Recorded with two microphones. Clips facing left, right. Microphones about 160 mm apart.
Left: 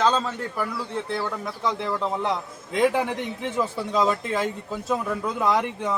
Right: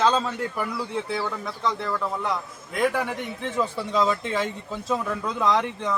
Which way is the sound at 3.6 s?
5° left (ahead or behind).